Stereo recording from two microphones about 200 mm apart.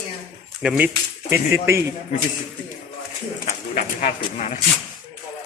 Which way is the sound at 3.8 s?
40° left (ahead or behind).